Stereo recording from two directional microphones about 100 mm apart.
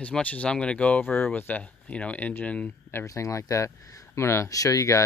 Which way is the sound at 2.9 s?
30° left (ahead or behind).